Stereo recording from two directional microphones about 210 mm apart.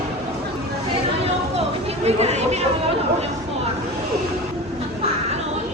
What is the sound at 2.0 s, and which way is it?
Chatter, 30° right (ahead or behind).